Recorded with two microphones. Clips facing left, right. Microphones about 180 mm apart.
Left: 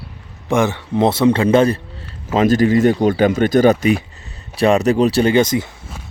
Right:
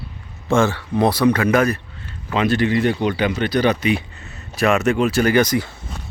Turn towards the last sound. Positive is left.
turn(degrees=20)  # may be behind; listen again after turning